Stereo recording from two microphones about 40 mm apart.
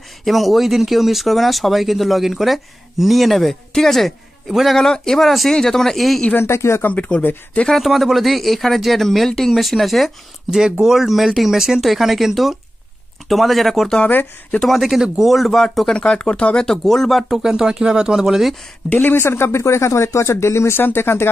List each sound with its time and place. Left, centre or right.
0.2 s speech: centre
4.5 s speech: centre
4.7 s speech: centre
6.3 s speech: left
6.9 s speech: left
7.6 s speech: centre
10.6 s speech: centre
15.9 s speech: centre
16.6 s speech: centre
17.3 s speech: centre
18.9 s speech: left
20.4 s speech: left